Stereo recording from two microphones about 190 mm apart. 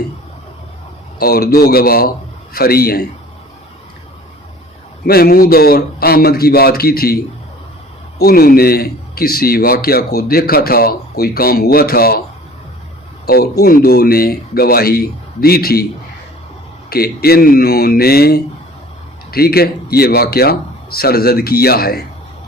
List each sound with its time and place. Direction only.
1.2 s a man's voice: 55° left (ahead or behind)
5.0 s a man's voice: 55° left (ahead or behind)
8.2 s a man's voice: 50° left (ahead or behind)
13.2 s a man's voice: 55° left (ahead or behind)
16.9 s a man's voice: 55° left (ahead or behind)